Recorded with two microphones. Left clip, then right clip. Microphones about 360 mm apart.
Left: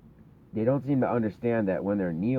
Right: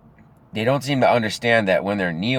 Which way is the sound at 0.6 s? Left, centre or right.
Centre.